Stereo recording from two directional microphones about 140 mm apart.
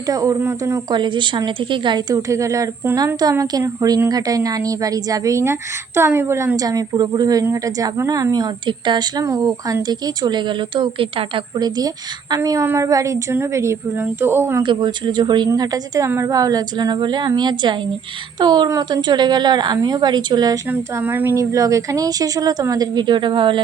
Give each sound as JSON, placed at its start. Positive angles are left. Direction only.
{"t": 0.1, "sound": "a woman's voice", "side_deg": -25}
{"t": 0.9, "sound": "a woman's voice", "side_deg": -35}
{"t": 12.4, "sound": "a woman's voice", "side_deg": -20}
{"t": 14.6, "sound": "a woman's voice", "side_deg": -35}
{"t": 20.7, "sound": "a woman's voice", "side_deg": -15}